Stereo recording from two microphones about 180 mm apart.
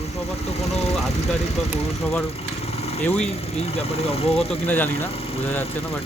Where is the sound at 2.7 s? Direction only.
35° left (ahead or behind).